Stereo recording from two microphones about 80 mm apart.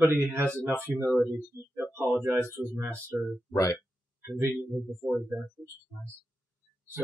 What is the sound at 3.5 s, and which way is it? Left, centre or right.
Speech, left.